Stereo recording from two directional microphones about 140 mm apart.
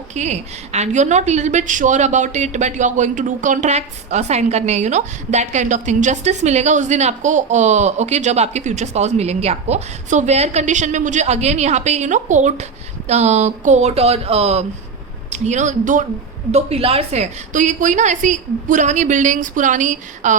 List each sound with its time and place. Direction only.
0.1 s a woman's voice: 55° right (ahead or behind)
15.3 s a woman's voice: 60° right (ahead or behind)
16.5 s a woman's voice: 50° right (ahead or behind)